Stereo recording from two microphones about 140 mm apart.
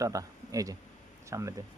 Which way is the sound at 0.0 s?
25° right (ahead or behind).